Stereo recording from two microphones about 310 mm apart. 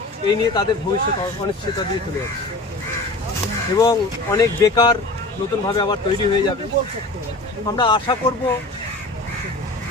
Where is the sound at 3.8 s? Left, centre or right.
Centre.